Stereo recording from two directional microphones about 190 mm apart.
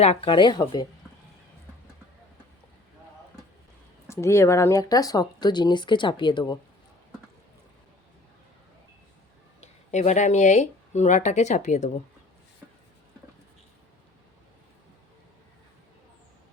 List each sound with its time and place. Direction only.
0.0 s speech: 30° left (ahead or behind)
4.1 s speech: 15° left (ahead or behind)
9.6 s speech: 35° left (ahead or behind)